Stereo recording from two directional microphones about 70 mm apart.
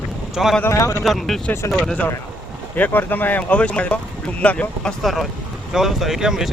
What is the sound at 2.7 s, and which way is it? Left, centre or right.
Speech, left.